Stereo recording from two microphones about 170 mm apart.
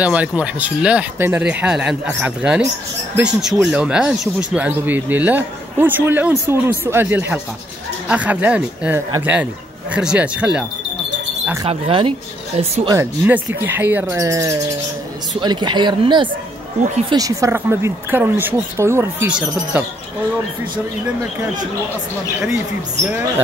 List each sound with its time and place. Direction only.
0.0 s speech: 10° right (ahead or behind)
11.6 s speech: 35° right (ahead or behind)
12.8 s speech: 15° right (ahead or behind)
23.0 s speech: 10° right (ahead or behind)